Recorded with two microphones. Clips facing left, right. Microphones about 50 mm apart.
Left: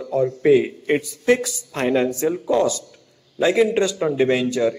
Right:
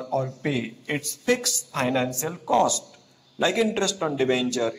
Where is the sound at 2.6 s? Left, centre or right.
Left.